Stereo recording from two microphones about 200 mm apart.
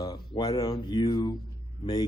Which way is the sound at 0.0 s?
20° left (ahead or behind).